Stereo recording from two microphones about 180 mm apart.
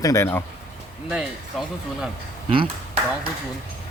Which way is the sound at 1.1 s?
5° right (ahead or behind).